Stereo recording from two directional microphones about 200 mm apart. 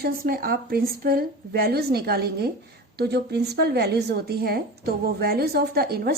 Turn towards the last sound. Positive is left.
turn(degrees=-50)  # may be behind; listen again after turning